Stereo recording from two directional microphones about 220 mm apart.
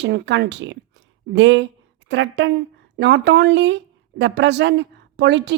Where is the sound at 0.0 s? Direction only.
50° right (ahead or behind).